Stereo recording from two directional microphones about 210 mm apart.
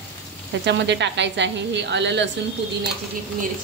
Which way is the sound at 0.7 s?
55° right (ahead or behind).